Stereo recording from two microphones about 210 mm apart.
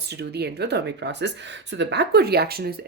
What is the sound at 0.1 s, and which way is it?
Speech, 50° right (ahead or behind).